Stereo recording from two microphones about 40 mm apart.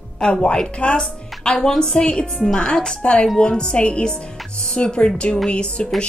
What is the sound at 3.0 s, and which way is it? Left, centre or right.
A woman's voice, left.